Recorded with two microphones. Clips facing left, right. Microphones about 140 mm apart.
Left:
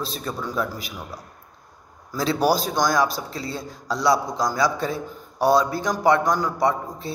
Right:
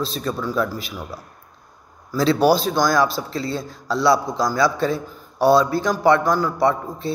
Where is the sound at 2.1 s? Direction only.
15° left (ahead or behind).